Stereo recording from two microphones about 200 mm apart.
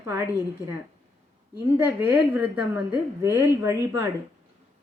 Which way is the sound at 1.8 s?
10° right (ahead or behind).